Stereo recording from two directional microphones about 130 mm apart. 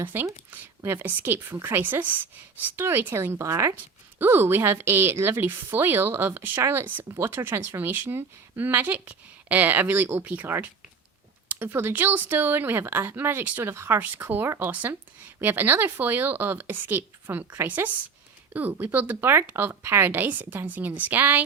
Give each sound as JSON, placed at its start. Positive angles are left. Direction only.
{"t": 0.0, "sound": "a woman's voice", "side_deg": -15}